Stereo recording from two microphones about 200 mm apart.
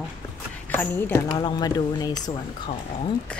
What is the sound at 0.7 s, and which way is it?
Speech, 10° left (ahead or behind).